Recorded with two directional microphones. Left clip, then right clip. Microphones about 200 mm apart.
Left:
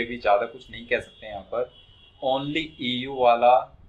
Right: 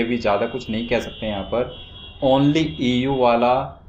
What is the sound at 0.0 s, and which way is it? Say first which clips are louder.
Speech: right 2 dB; 45° right (ahead or behind).